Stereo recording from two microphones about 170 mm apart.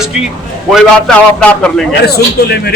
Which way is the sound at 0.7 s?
Centre (ahead or behind).